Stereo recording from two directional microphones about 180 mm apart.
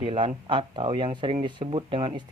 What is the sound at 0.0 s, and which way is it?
Speech, 30° right (ahead or behind).